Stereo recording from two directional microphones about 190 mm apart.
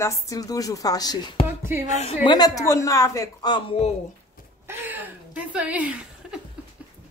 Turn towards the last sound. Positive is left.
turn(degrees=-5)  # may be behind; listen again after turning